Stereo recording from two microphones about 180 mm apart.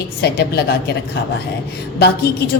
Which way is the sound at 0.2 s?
65° left (ahead or behind).